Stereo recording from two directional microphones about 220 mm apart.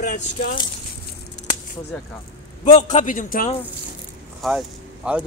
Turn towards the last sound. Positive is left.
turn(degrees=-5)  # may be behind; listen again after turning